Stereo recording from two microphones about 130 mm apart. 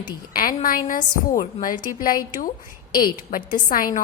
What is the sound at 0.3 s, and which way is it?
A woman's voice, 90° left.